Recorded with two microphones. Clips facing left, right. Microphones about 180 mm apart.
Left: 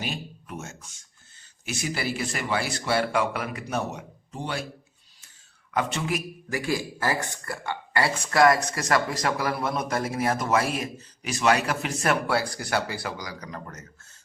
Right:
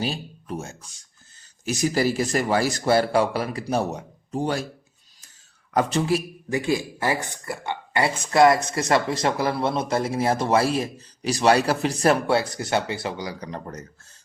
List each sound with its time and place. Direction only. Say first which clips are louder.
0.0 s speech: right 5 dB; 35° right (ahead or behind)
5.7 s a man's voice: right 6 dB; 35° right (ahead or behind)